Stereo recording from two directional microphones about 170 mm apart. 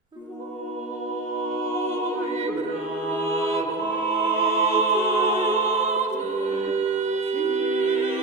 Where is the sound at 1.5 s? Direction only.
15° left (ahead or behind).